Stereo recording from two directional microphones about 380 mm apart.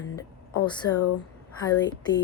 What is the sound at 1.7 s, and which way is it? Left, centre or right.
Speech, centre.